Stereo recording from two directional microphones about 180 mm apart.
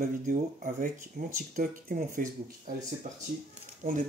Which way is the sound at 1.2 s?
55° right (ahead or behind).